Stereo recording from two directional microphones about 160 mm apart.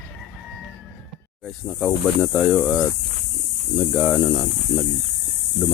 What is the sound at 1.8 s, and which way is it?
Speech, 10° left (ahead or behind).